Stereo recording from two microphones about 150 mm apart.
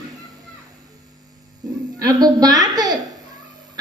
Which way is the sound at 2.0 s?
25° right (ahead or behind).